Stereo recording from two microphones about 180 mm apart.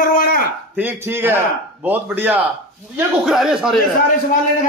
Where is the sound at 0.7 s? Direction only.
10° right (ahead or behind).